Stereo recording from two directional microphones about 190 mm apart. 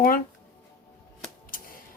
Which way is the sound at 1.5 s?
50° left (ahead or behind).